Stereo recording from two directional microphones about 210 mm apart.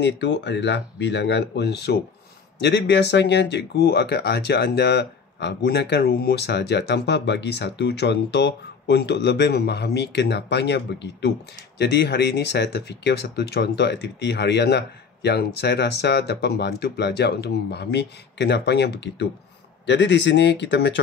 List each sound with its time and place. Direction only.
0.0 s speech: 55° left (ahead or behind)